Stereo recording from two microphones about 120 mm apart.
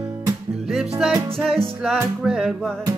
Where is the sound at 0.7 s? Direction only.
5° right (ahead or behind).